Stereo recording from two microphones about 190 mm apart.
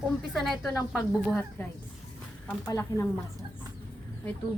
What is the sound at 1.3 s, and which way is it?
Speech, 10° left (ahead or behind).